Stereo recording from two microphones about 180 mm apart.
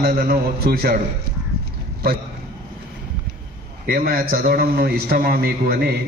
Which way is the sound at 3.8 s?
55° right (ahead or behind).